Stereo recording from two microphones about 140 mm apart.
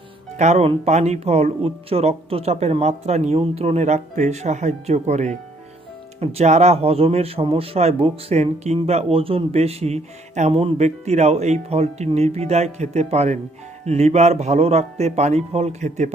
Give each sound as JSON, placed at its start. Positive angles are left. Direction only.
{"t": 0.3, "sound": "speech", "side_deg": -55}